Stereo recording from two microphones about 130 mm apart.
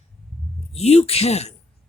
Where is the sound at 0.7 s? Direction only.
55° left (ahead or behind).